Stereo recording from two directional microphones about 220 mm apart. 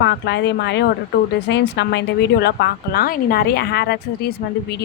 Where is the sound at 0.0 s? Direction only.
50° left (ahead or behind).